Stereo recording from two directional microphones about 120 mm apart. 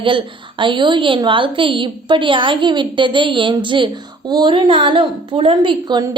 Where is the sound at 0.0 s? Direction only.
45° right (ahead or behind).